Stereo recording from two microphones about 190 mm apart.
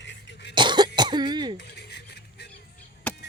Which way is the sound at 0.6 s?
25° right (ahead or behind).